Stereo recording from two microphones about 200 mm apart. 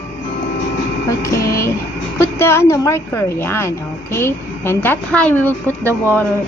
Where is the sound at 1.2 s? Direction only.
15° left (ahead or behind).